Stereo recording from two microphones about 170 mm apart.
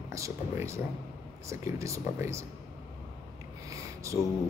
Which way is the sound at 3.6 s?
20° right (ahead or behind).